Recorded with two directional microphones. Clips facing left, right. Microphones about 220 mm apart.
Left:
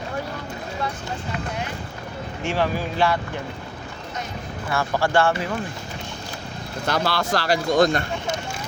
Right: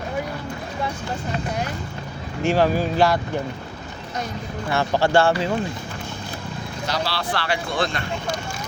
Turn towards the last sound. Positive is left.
turn(degrees=45)  # may be behind; listen again after turning